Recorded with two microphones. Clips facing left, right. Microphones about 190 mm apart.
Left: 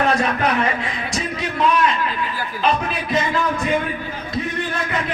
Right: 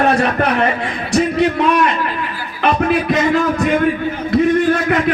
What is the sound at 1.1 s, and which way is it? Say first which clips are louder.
Speech: right 14 dB; 65° right (ahead or behind).